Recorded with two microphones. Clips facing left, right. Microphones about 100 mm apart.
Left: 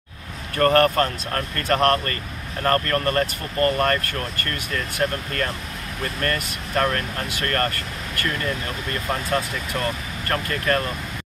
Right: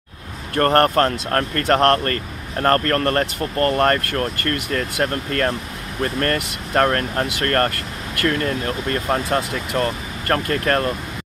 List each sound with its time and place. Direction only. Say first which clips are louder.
0.6 s speech: right 2 dB; 45° right (ahead or behind)
6.7 s speech: right 5 dB; 45° right (ahead or behind)